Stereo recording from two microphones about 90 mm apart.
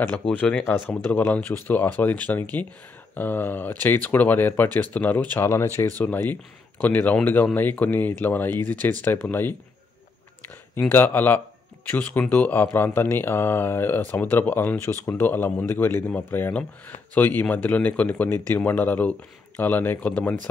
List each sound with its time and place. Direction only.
0.3 s speech: 15° left (ahead or behind)
10.8 s speech: 20° left (ahead or behind)